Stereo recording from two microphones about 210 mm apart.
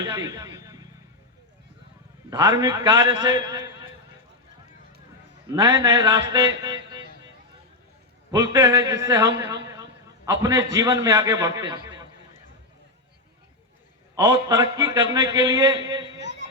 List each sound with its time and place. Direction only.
0.0 s a sound: 20° right (ahead or behind)
2.3 s a man's voice: 20° right (ahead or behind)
5.5 s a man's voice: 20° right (ahead or behind)
8.3 s a man's voice: 20° right (ahead or behind)
10.3 s a man's voice: 15° right (ahead or behind)
14.2 s a man's voice: 15° right (ahead or behind)